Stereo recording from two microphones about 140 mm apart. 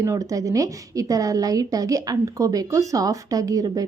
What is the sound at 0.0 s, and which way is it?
A woman's voice, 25° right (ahead or behind).